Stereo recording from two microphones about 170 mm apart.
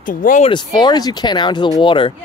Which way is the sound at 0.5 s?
25° left (ahead or behind).